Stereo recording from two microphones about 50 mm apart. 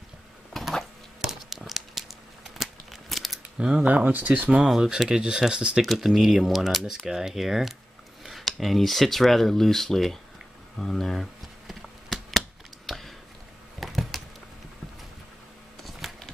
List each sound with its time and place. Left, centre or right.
0.5 s a sound: centre
1.2 s crumpling: centre
3.5 s speech: centre
3.8 s speech: right
4.6 s speech: centre
5.8 s speech: centre
11.6 s a sound: centre
16.0 s clip-clop: centre